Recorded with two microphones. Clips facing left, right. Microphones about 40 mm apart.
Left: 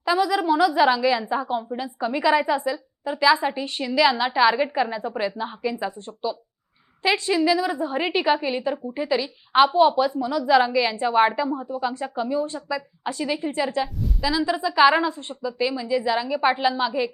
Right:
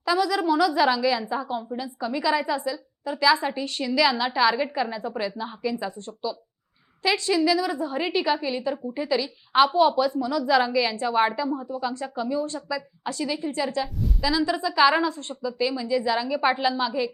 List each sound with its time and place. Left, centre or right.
0.0 s a woman's voice: centre
13.8 s a woman's voice: centre